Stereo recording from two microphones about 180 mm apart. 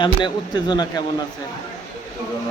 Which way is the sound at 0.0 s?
25° left (ahead or behind).